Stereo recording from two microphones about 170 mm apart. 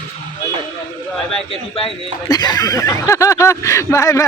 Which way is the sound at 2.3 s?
25° left (ahead or behind).